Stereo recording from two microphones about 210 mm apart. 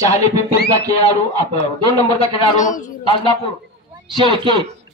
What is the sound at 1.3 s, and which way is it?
Speech, 15° right (ahead or behind).